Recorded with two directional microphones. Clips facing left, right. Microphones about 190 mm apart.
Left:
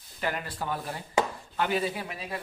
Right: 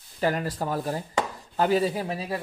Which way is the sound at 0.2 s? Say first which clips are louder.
Right 6 dB; 40° right (ahead or behind).